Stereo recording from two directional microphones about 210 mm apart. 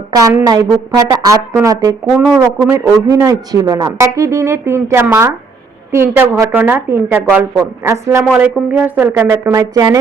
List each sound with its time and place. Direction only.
0.1 s a man's voice: 15° right (ahead or behind)
2.0 s a man's voice: 5° right (ahead or behind)